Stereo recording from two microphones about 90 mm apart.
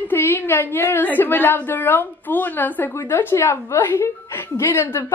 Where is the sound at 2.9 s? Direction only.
30° left (ahead or behind).